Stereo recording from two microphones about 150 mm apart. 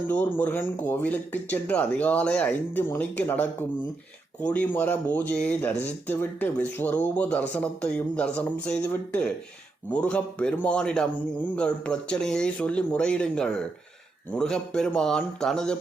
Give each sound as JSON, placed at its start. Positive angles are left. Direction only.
{"t": 0.1, "sound": "speech", "side_deg": 10}